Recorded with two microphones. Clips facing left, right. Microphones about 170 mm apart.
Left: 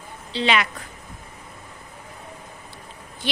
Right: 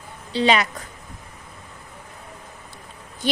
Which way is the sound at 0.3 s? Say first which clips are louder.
Right 3 dB; 40° right (ahead or behind).